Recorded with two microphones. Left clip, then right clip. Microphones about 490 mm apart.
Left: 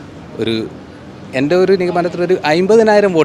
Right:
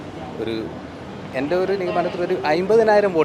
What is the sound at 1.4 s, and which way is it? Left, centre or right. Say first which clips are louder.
A man's voice: left 9 dB; left.